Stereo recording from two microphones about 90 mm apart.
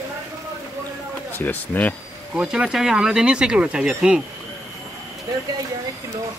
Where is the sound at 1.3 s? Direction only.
20° left (ahead or behind).